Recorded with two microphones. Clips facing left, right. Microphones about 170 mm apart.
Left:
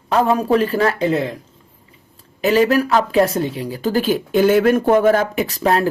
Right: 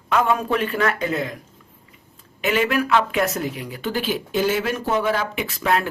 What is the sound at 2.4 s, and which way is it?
Speech, 35° left (ahead or behind).